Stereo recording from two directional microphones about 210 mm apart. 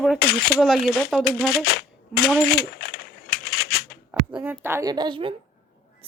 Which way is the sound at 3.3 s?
45° left (ahead or behind).